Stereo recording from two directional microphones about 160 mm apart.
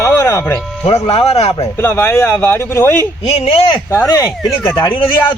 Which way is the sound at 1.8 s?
15° left (ahead or behind).